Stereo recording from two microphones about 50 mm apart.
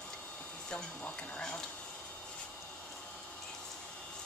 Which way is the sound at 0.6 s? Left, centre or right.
Left.